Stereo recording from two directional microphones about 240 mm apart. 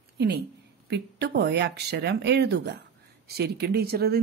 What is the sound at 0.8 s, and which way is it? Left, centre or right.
Speech, right.